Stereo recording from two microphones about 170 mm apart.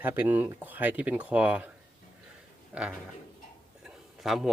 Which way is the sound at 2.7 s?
5° right (ahead or behind).